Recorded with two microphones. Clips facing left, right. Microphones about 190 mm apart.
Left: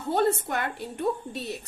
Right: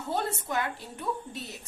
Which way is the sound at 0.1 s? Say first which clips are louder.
Left 7 dB; 60° left (ahead or behind).